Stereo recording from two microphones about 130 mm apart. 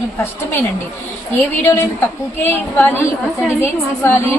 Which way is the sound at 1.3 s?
20° left (ahead or behind).